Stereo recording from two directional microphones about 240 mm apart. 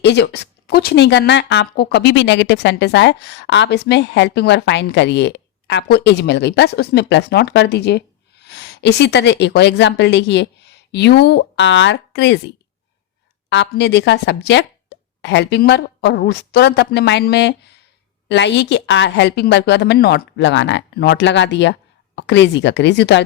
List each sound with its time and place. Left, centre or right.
0.0 s speech: left
13.5 s speech: left